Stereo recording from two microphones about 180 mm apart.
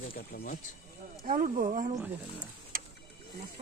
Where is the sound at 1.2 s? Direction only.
50° right (ahead or behind).